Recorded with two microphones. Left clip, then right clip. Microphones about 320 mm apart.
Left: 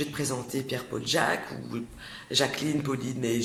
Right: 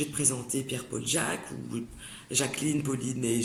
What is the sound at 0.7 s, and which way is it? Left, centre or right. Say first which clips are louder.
Speech: left 3 dB; centre.